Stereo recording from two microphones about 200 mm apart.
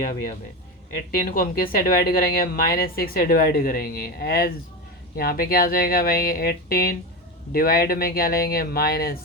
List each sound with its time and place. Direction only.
1.2 s a woman's voice: 45° left (ahead or behind)